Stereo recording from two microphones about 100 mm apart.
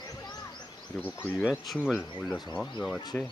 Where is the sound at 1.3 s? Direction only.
15° right (ahead or behind).